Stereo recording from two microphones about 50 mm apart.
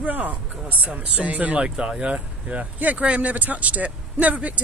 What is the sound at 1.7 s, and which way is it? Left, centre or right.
Speech, centre.